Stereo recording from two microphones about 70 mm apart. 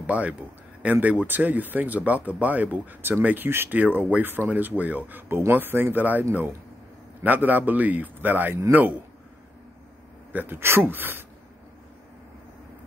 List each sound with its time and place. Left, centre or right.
0.0 s speech: centre
7.2 s speech: right
10.3 s speech: right